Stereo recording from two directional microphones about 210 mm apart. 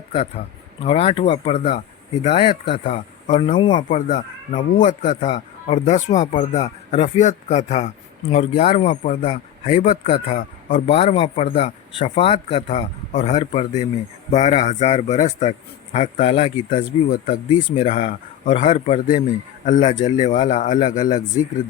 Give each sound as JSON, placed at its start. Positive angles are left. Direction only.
{"t": 0.9, "sound": "speech", "side_deg": 30}
{"t": 3.6, "sound": "speech", "side_deg": 20}
{"t": 3.8, "sound": "speech", "side_deg": 35}
{"t": 16.6, "sound": "speech", "side_deg": 40}